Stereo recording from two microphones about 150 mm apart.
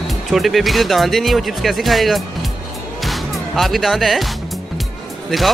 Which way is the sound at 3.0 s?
Centre (ahead or behind).